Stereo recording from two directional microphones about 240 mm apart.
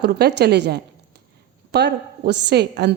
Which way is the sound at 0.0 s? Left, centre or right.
Right.